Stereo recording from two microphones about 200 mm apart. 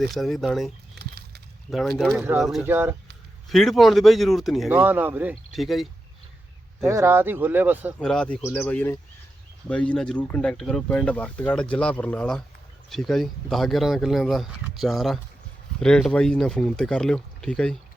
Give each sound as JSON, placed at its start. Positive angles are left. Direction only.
{"t": 0.0, "sound": "speech", "side_deg": 0}
{"t": 0.9, "sound": "a sound", "side_deg": -50}
{"t": 2.0, "sound": "speech", "side_deg": 0}
{"t": 3.5, "sound": "speech", "side_deg": 0}
{"t": 6.8, "sound": "speech", "side_deg": -15}
{"t": 7.9, "sound": "speech", "side_deg": 5}